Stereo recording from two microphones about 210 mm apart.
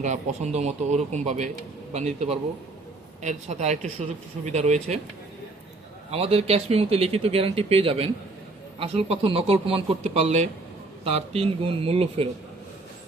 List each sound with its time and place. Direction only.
0.0 s speech: 35° right (ahead or behind)
6.1 s speech: 30° right (ahead or behind)